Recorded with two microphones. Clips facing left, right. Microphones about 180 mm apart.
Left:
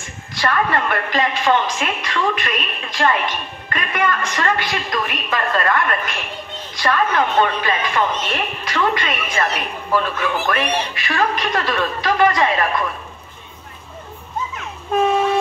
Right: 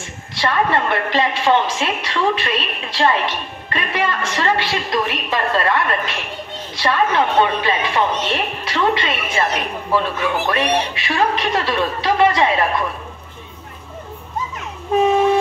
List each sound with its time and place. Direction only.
0.3 s a woman's voice: 25° right (ahead or behind)